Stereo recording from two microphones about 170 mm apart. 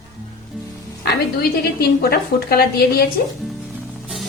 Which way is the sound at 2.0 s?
65° left (ahead or behind).